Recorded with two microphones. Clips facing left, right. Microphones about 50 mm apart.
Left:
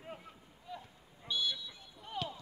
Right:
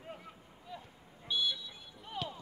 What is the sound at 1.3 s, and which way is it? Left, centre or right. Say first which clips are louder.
Vehicle: right 2 dB; centre.